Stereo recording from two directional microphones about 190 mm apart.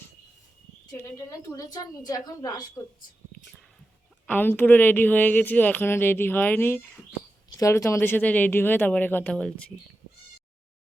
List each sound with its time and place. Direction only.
0.9 s a woman's voice: 15° left (ahead or behind)
4.3 s speech: 10° left (ahead or behind)